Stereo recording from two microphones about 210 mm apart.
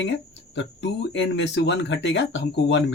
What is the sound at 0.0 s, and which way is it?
Speech, 60° left (ahead or behind).